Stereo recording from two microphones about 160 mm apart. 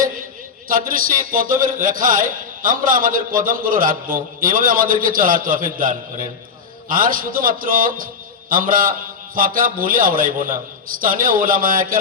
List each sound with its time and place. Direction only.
0.7 s a man's voice: 60° right (ahead or behind)